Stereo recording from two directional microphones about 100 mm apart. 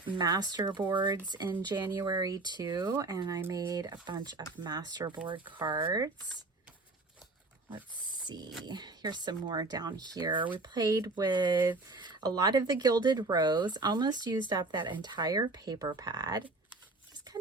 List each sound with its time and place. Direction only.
0.1 s speech: 45° right (ahead or behind)
8.0 s a sound: 50° right (ahead or behind)
8.6 s speech: 45° right (ahead or behind)